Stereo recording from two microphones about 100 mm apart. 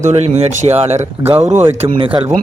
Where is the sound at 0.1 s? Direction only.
90° right.